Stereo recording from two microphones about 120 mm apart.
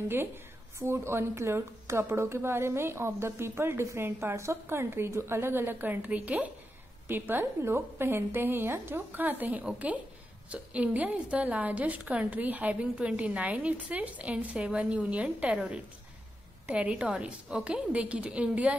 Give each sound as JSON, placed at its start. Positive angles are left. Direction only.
{"t": 0.7, "sound": "a woman's voice", "side_deg": -20}